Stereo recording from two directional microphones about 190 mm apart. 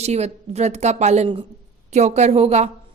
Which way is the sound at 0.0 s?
35° right (ahead or behind).